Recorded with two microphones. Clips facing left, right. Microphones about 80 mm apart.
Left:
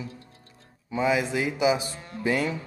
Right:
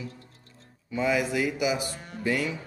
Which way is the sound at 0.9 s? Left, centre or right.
Centre.